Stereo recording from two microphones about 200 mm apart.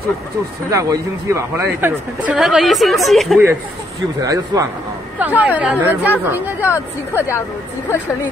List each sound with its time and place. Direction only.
0.7 s a man's voice: 15° right (ahead or behind); by 3.4 s centre (ahead or behind)
4.2 s speech: 15° right (ahead or behind)
6.7 s speech: 15° left (ahead or behind)